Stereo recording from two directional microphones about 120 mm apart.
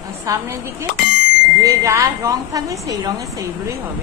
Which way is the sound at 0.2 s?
25° right (ahead or behind).